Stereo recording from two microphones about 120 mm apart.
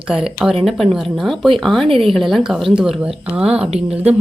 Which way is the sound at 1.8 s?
50° right (ahead or behind).